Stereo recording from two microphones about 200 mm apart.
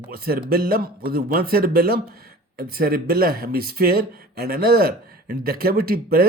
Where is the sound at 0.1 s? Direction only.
50° right (ahead or behind).